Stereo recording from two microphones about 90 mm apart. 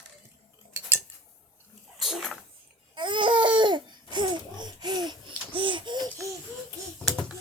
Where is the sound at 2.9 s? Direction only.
65° right (ahead or behind).